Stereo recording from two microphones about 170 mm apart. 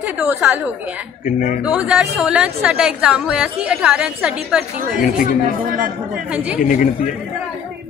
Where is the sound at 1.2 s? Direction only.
50° left (ahead or behind).